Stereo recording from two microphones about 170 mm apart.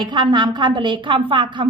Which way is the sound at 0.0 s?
25° right (ahead or behind).